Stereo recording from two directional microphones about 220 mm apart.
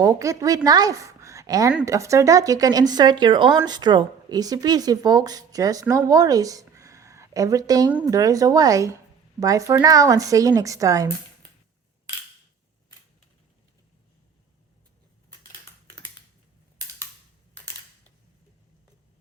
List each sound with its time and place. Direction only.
0.0 s a woman's voice: 15° right (ahead or behind)